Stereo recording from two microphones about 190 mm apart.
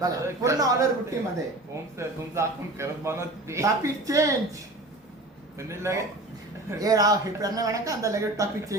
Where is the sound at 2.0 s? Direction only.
15° right (ahead or behind).